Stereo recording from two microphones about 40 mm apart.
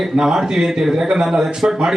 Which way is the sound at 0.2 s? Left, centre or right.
Centre.